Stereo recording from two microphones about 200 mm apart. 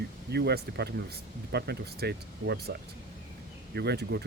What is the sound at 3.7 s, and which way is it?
Speech, 55° right (ahead or behind).